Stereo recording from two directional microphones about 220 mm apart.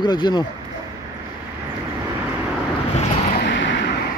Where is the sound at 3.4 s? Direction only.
55° left (ahead or behind).